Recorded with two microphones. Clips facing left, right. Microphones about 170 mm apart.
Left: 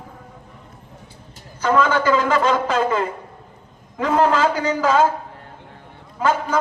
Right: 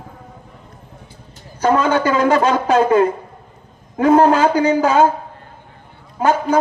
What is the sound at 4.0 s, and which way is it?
Speech, 40° right (ahead or behind).